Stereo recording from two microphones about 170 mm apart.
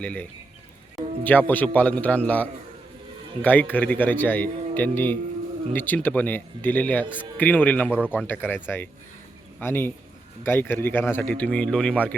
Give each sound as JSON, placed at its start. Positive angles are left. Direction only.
{"t": 0.0, "sound": "a man's voice", "side_deg": 10}
{"t": 7.0, "sound": "a man's voice", "side_deg": -10}
{"t": 7.3, "sound": "a man's voice", "side_deg": 10}
{"t": 7.9, "sound": "a man's voice", "side_deg": -5}
{"t": 8.3, "sound": "a man's voice", "side_deg": 10}